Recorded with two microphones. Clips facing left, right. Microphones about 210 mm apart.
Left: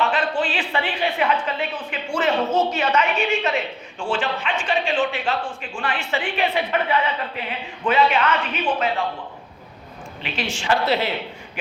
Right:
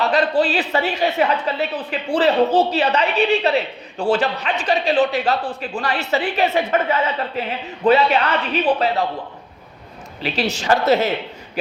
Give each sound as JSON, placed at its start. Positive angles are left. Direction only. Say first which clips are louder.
{"t": 0.0, "sound": "a woman's voice", "louder": "right 5 dB", "side_deg": -40}
{"t": 10.2, "sound": "a woman's voice", "louder": "right 5 dB", "side_deg": -40}